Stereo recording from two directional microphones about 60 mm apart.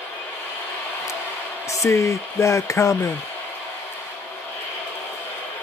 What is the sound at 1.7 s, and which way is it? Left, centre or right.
Speech, left.